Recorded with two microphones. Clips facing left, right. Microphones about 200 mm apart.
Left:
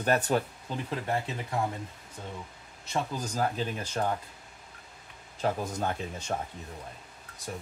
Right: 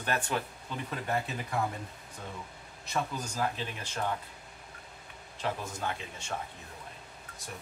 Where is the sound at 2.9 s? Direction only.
35° left (ahead or behind).